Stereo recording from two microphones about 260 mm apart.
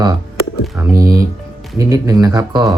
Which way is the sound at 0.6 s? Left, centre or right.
Centre.